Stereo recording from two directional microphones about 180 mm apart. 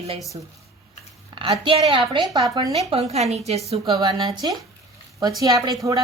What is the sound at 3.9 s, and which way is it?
A woman's voice, 20° right (ahead or behind).